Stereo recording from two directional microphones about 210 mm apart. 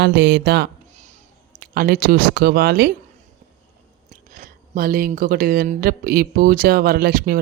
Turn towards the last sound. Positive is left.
turn(degrees=-45)  # may be behind; listen again after turning